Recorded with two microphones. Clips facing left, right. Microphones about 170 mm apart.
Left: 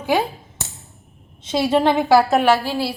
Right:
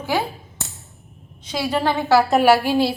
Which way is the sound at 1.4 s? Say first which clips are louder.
Left 5 dB; 25° left (ahead or behind).